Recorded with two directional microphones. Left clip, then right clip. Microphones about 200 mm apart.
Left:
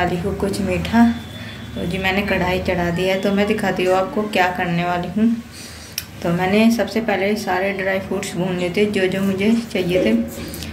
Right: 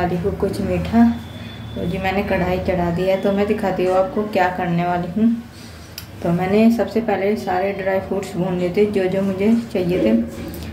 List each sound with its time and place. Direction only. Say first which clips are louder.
0.0 s a woman's voice: even; 5° right (ahead or behind)
6.2 s a woman's voice: even; 10° right (ahead or behind)